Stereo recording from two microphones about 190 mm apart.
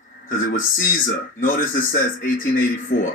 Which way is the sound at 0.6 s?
45° left (ahead or behind).